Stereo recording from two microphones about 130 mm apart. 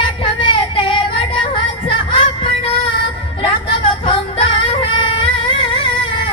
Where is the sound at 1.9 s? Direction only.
40° left (ahead or behind).